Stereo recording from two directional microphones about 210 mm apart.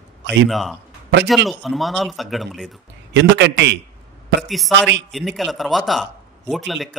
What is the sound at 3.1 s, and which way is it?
Speech, 55° right (ahead or behind).